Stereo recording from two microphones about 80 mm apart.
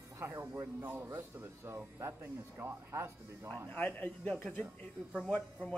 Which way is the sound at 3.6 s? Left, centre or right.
Centre.